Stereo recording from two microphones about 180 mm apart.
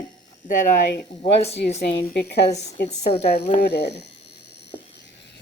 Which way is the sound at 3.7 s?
70° left (ahead or behind).